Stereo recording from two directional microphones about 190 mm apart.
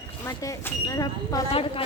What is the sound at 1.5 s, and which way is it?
Speech, 30° left (ahead or behind).